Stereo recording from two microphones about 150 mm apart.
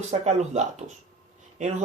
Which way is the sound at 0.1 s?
50° right (ahead or behind).